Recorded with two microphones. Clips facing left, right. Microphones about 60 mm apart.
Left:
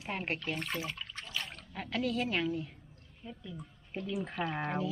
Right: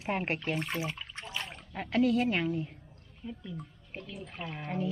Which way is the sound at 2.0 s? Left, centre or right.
Centre.